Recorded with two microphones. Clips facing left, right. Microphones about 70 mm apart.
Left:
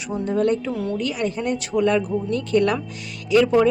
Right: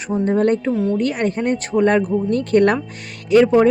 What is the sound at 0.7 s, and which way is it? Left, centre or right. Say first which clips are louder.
Speech: right 6 dB; right.